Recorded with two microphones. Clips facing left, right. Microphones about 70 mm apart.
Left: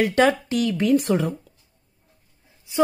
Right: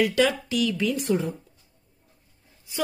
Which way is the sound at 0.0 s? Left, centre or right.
Left.